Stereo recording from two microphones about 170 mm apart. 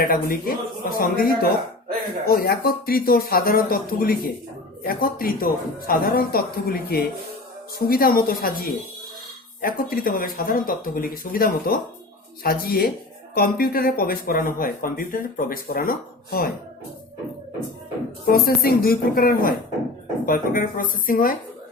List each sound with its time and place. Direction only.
0.1 s speech: 60° left (ahead or behind)
18.3 s speech: 60° left (ahead or behind)